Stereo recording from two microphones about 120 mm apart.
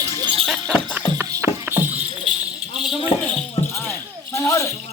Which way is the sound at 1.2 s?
25° right (ahead or behind).